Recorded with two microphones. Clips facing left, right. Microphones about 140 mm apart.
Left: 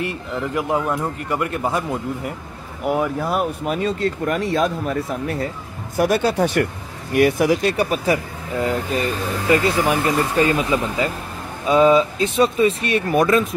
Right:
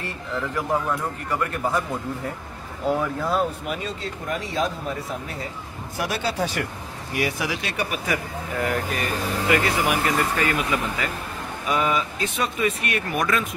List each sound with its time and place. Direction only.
0.6 s speech: 20° left (ahead or behind)
3.8 s speech: 60° left (ahead or behind)
5.9 s speech: 50° left (ahead or behind); by 13.5 s 30° left (ahead or behind)